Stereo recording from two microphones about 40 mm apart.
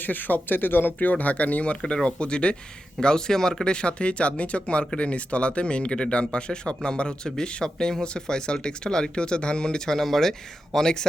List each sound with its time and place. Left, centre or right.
0.0 s speech: left
0.9 s speech: left; by 11.0 s centre